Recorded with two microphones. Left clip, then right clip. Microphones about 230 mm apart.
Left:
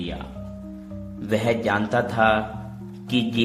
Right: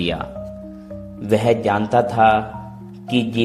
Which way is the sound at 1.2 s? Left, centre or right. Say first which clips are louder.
Right 6 dB; centre.